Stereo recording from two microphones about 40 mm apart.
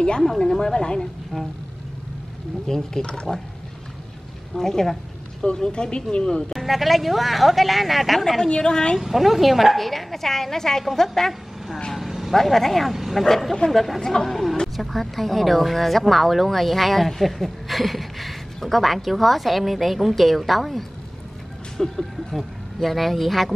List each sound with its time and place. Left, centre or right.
0.4 s a woman's voice: centre
2.6 s speech: centre
4.6 s a woman's voice: centre
6.5 s a woman's voice: centre
8.5 s a woman's voice: left
9.0 s a woman's voice: centre
11.9 s vehicle: centre
12.4 s a woman's voice: centre
12.9 s speech: centre
13.2 s a woman's voice: centre